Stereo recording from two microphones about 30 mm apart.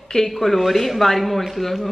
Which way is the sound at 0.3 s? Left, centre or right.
Centre.